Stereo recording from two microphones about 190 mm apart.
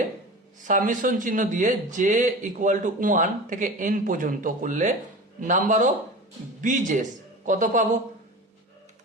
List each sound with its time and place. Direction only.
0.7 s speech: 45° right (ahead or behind)